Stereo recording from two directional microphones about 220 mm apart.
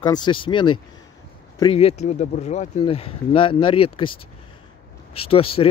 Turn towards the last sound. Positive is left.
turn(degrees=25)  # may be behind; listen again after turning